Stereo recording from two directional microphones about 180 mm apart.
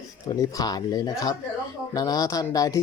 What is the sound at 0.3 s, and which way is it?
Speech, 20° left (ahead or behind).